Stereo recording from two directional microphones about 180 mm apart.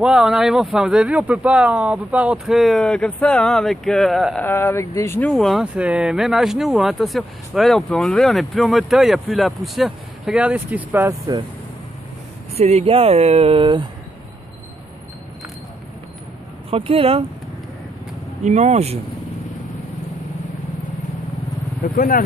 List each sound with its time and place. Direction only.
0.0 s speech: 5° right (ahead or behind)
4.4 s speech: 10° left (ahead or behind); by 11.4 s 20° right (ahead or behind)
12.5 s speech: 35° right (ahead or behind)
16.7 s speech: 30° right (ahead or behind)
18.4 s speech: 40° right (ahead or behind)
21.8 s speech: 50° left (ahead or behind)